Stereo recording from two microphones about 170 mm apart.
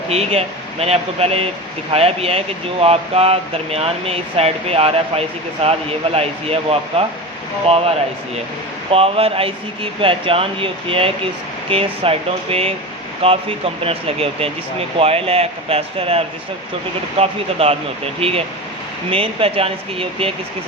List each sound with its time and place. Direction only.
0.1 s speech: 35° right (ahead or behind)
8.9 s speech: 35° right (ahead or behind)